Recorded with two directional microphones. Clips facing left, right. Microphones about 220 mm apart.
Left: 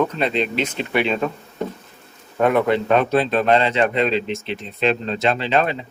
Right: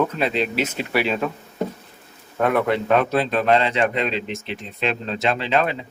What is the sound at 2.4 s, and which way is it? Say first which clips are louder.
Speech: left 3 dB; centre (ahead or behind).